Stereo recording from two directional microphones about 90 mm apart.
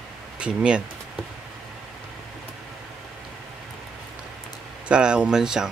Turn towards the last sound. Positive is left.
turn(degrees=-5)  # may be behind; listen again after turning